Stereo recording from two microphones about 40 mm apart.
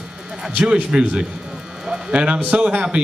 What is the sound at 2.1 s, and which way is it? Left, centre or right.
Speech, right.